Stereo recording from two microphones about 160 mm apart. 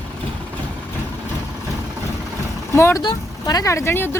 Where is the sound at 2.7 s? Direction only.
20° left (ahead or behind).